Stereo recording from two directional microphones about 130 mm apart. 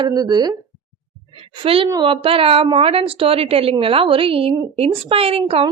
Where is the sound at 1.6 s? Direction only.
45° right (ahead or behind).